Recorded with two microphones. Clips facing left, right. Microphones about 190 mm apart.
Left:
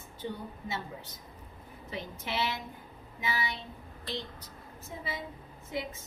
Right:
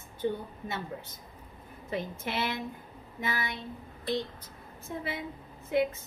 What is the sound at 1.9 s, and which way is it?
A woman's voice, 50° right (ahead or behind).